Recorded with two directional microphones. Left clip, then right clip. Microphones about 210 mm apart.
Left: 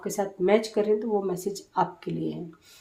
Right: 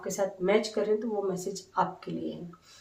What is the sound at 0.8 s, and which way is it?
Speech, 55° left (ahead or behind).